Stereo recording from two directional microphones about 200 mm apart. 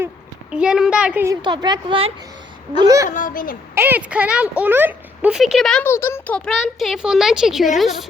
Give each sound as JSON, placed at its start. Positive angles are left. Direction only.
{"t": 0.5, "sound": "speech", "side_deg": -5}
{"t": 1.4, "sound": "a woman's voice", "side_deg": -20}
{"t": 3.1, "sound": "a woman's voice", "side_deg": 40}
{"t": 3.8, "sound": "speech", "side_deg": -10}